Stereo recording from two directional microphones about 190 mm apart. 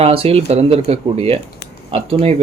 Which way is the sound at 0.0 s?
30° right (ahead or behind).